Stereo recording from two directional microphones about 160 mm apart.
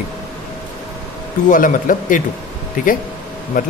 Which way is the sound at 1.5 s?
55° left (ahead or behind).